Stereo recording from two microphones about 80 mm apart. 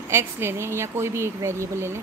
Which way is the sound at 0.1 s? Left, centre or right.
Right.